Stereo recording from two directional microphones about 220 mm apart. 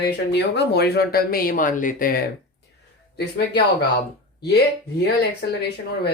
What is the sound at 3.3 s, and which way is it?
Speech, 50° left (ahead or behind).